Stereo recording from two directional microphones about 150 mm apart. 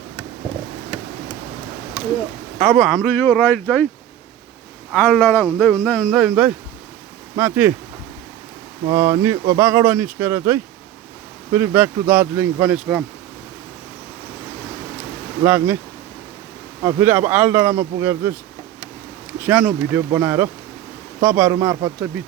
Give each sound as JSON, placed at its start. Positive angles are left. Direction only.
{"t": 2.6, "sound": "speech", "side_deg": 0}
{"t": 3.2, "sound": "speech", "side_deg": 15}
{"t": 4.9, "sound": "speech", "side_deg": 10}
{"t": 8.9, "sound": "speech", "side_deg": -20}
{"t": 15.4, "sound": "speech", "side_deg": -15}
{"t": 16.8, "sound": "speech", "side_deg": -15}
{"t": 19.4, "sound": "speech", "side_deg": -5}